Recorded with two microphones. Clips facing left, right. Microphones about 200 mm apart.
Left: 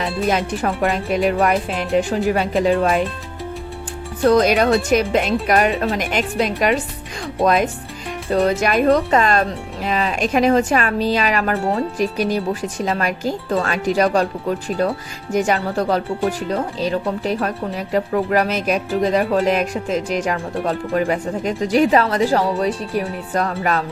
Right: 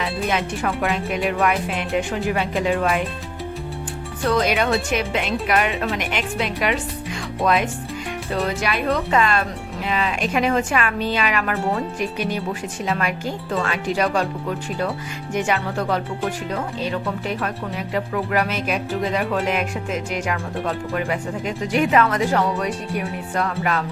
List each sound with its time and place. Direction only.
0.0 s speech: 35° left (ahead or behind)
4.2 s speech: 40° left (ahead or behind)
15.3 s speech: 40° left (ahead or behind)